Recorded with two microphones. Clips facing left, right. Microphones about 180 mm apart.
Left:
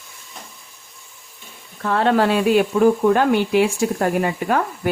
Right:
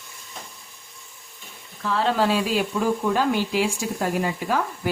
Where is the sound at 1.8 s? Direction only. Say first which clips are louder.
Left 5 dB; 55° left (ahead or behind).